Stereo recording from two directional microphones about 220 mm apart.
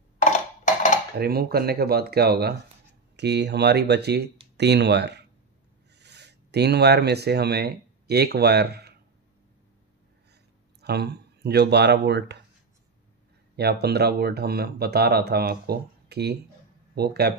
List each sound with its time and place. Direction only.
1.1 s speech: 45° right (ahead or behind)
10.8 s speech: 50° right (ahead or behind)
13.6 s speech: 45° right (ahead or behind)